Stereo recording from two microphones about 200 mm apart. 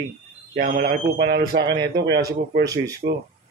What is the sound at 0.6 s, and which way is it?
A man's voice, 50° right (ahead or behind).